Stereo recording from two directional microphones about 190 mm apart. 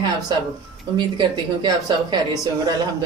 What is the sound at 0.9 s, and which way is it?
Speech, 25° right (ahead or behind).